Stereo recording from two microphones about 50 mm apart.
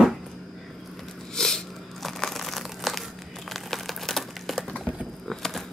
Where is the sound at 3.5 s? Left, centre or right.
Centre.